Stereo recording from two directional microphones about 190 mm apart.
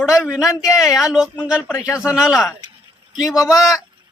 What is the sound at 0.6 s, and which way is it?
A man's voice, 5° right (ahead or behind).